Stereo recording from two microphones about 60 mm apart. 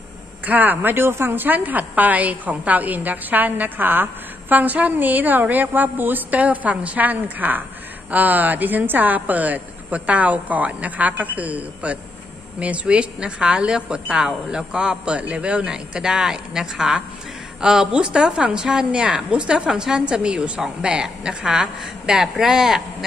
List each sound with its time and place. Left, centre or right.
0.5 s a woman's voice: right; by 23.0 s centre